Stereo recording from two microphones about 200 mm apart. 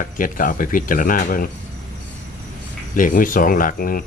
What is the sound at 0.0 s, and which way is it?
Speech, 45° left (ahead or behind).